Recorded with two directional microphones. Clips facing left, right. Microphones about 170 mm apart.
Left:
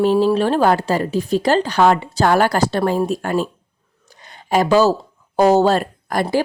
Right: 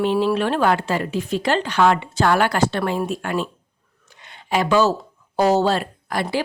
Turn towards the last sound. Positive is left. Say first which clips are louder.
# left 5 dB
turn(degrees=45)  # may be behind; listen again after turning